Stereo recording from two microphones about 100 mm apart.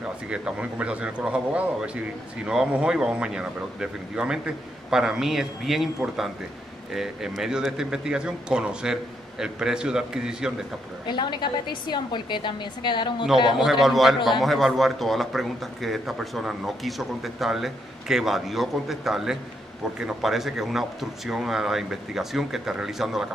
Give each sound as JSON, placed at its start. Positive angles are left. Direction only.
{"t": 0.0, "sound": "a man's voice", "side_deg": -10}
{"t": 6.9, "sound": "a man's voice", "side_deg": -5}
{"t": 11.1, "sound": "a woman's voice", "side_deg": 50}
{"t": 13.6, "sound": "a man's voice", "side_deg": 0}